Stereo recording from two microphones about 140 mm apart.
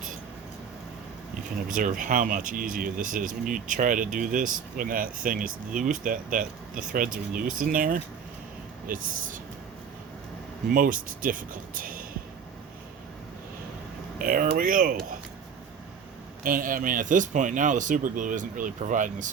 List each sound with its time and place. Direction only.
1.7 s speech: 75° right (ahead or behind)
10.8 s speech: 75° right (ahead or behind)
14.2 s speech: 90° right
16.4 s speech: 80° right; by 19.3 s 65° right (ahead or behind)